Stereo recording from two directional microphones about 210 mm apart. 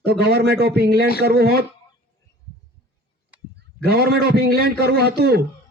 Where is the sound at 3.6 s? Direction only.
50° right (ahead or behind).